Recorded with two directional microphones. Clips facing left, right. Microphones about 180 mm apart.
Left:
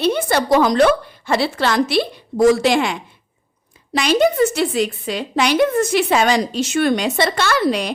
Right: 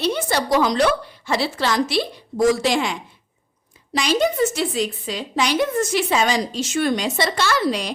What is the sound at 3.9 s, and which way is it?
A woman's voice, 60° left (ahead or behind).